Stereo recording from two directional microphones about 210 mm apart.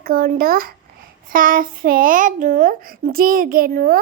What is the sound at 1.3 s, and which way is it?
Speech, 40° right (ahead or behind).